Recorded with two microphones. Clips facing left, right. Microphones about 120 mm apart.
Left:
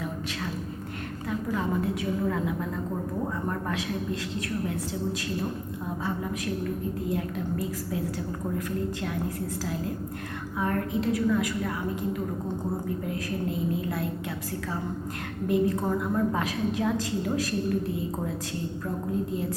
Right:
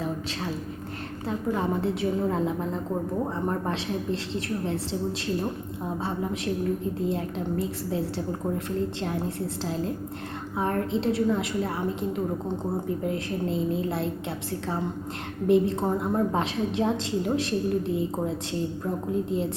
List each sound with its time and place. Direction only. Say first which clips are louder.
1.3 s a woman's voice: right 2 dB; 30° right (ahead or behind)
10.6 s a woman's voice: right 2 dB; 30° right (ahead or behind)
13.1 s a woman's voice: right 3 dB; 25° right (ahead or behind)
15.4 s a woman's voice: right 3 dB; 25° right (ahead or behind)